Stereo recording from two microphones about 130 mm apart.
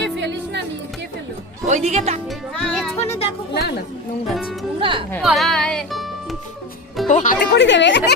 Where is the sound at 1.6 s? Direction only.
60° right (ahead or behind).